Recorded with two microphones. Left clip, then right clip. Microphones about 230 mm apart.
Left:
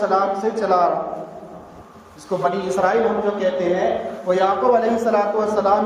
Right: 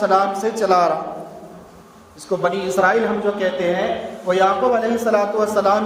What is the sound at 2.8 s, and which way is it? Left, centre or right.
Speech, right.